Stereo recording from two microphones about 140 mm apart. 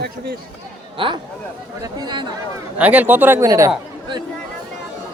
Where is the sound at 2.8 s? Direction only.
10° right (ahead or behind).